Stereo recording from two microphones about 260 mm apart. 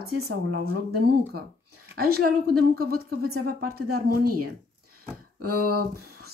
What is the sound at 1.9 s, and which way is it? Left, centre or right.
A woman's voice, right.